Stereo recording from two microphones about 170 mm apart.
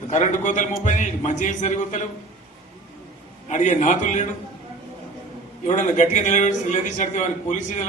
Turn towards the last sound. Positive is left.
turn(degrees=45)  # may be behind; listen again after turning